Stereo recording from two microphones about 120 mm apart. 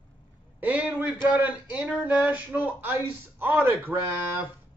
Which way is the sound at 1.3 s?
10° right (ahead or behind).